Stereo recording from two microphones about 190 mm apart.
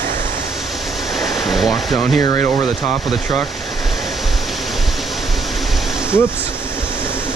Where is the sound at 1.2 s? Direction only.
Centre (ahead or behind).